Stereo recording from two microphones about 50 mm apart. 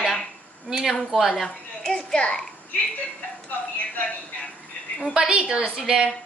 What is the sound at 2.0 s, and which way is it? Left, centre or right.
Speech, centre.